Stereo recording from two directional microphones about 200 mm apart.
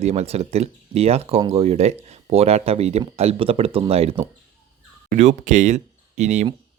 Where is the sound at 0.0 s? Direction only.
30° right (ahead or behind).